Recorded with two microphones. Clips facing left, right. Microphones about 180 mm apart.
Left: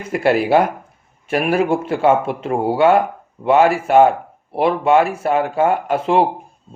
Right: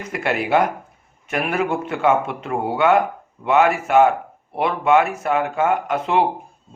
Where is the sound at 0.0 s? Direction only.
30° left (ahead or behind).